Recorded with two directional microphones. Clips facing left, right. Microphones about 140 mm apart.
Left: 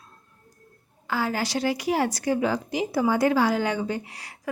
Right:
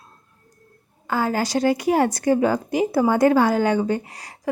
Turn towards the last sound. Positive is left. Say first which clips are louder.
# right 1 dB
turn(degrees=-40)  # may be behind; listen again after turning